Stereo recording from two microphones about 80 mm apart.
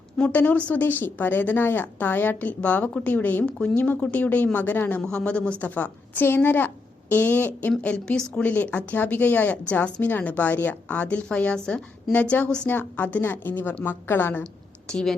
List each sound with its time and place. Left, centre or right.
0.2 s speech: centre
7.8 s a woman's voice: centre
14.4 s a sound: centre